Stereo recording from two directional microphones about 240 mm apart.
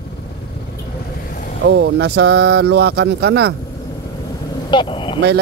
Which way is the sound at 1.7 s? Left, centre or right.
Right.